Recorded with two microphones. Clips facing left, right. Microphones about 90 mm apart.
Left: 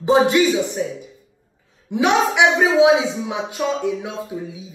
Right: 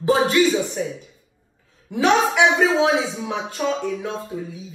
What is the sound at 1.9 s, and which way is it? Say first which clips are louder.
A woman's voice: left 1 dB; 15° left (ahead or behind).